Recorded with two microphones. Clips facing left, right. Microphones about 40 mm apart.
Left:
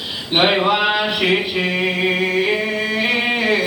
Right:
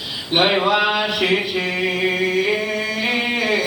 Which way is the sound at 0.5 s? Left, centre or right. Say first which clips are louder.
Left 1 dB; centre.